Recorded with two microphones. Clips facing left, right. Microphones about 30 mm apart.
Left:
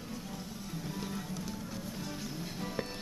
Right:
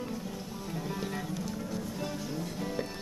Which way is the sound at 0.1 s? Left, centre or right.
Centre.